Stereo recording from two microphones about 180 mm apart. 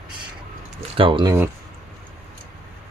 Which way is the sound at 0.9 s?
30° right (ahead or behind).